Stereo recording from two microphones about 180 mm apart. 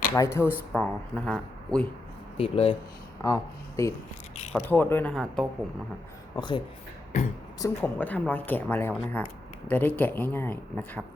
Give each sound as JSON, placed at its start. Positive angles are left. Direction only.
{"t": 0.2, "sound": "speech", "side_deg": 15}
{"t": 2.4, "sound": "speech", "side_deg": 30}
{"t": 3.2, "sound": "speech", "side_deg": 15}
{"t": 6.3, "sound": "speech", "side_deg": 25}
{"t": 7.6, "sound": "speech", "side_deg": 10}